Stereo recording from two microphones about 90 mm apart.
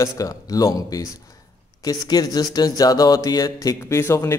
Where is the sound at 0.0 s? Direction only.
40° left (ahead or behind).